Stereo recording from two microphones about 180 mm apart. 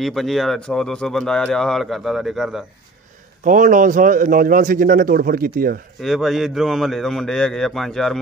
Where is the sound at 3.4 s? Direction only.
45° right (ahead or behind).